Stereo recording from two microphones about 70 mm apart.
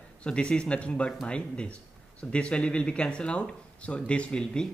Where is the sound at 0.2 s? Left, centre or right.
Centre.